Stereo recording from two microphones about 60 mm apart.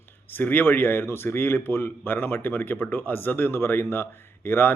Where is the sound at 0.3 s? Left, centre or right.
Left.